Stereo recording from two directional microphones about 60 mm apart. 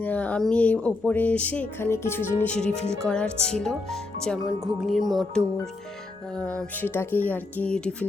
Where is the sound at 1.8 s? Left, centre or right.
Left.